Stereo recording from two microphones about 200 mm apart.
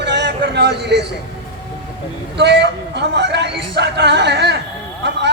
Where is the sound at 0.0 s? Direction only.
60° right (ahead or behind).